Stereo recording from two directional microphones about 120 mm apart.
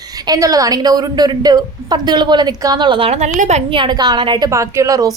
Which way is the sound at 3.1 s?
70° right (ahead or behind).